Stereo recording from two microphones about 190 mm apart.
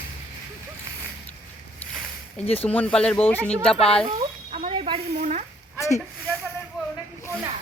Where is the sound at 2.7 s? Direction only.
10° left (ahead or behind).